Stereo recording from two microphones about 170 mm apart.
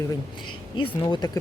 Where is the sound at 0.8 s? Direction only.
25° left (ahead or behind).